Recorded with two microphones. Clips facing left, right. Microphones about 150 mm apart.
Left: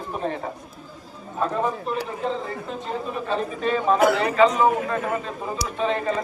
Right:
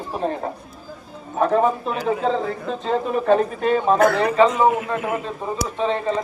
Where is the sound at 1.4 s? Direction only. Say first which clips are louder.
Right 6 dB; 90° right.